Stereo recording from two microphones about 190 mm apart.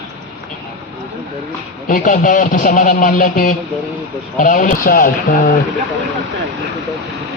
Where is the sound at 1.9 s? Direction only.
45° left (ahead or behind).